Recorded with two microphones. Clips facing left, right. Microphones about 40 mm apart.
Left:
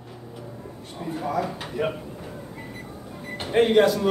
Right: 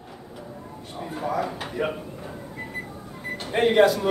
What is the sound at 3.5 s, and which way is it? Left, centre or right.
Speech, centre.